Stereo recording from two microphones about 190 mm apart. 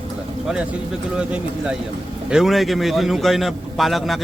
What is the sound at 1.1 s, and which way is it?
A man's voice, 5° right (ahead or behind).